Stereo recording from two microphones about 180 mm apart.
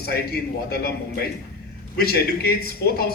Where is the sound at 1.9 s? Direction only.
60° left (ahead or behind).